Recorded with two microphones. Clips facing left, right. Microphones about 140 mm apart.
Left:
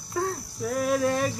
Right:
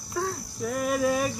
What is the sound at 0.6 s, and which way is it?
Speech, 5° right (ahead or behind).